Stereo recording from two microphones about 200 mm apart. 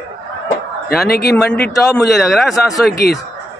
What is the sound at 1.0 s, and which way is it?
Speech, 50° left (ahead or behind).